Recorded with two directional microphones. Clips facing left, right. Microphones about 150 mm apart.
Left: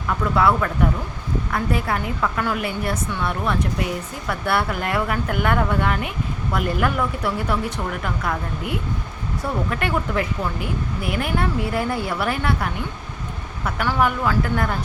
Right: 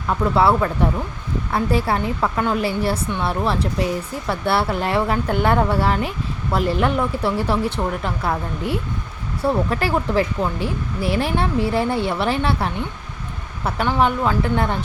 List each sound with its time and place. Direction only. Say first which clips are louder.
0.3 s speech: right 2 dB; 30° right (ahead or behind)